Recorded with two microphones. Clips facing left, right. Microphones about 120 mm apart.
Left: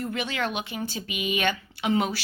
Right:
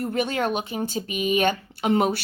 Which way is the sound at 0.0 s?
45° right (ahead or behind).